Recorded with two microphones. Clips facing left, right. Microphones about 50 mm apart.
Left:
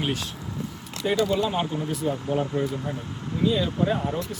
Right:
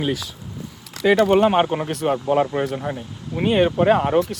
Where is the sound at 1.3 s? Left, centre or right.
Right.